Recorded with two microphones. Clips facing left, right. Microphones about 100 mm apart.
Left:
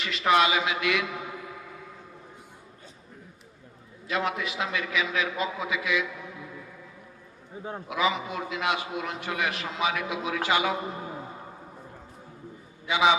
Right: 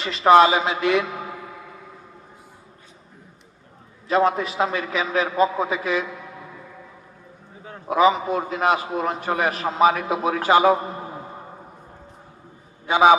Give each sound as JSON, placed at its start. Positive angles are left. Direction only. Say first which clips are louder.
{"t": 0.0, "sound": "a man's voice", "louder": "right 9 dB", "side_deg": -35}
{"t": 4.1, "sound": "a man's voice", "louder": "right 9 dB", "side_deg": -35}
{"t": 7.9, "sound": "a man's voice", "louder": "right 10 dB", "side_deg": -40}
{"t": 12.8, "sound": "a man's voice", "louder": "right 8 dB", "side_deg": -45}